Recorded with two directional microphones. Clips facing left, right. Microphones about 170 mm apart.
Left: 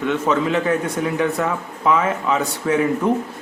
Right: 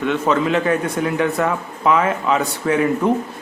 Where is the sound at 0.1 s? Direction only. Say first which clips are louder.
Right 1 dB; 65° right (ahead or behind).